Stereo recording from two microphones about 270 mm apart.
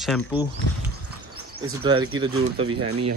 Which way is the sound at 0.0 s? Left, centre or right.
Centre.